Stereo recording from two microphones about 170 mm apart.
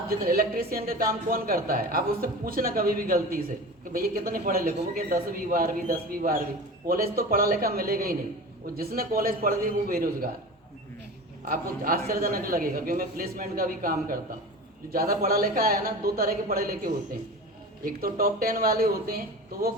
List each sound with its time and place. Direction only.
0.1 s a man's voice: 60° right (ahead or behind)
11.4 s a man's voice: 55° right (ahead or behind)